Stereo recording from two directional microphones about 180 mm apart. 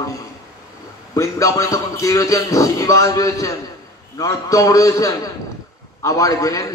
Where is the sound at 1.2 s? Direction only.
20° left (ahead or behind).